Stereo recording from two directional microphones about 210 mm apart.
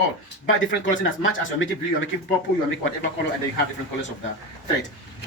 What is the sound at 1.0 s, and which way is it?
Speech, 65° left (ahead or behind).